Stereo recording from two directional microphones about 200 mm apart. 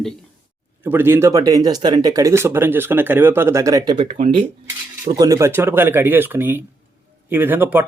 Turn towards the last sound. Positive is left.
turn(degrees=-10)  # may be behind; listen again after turning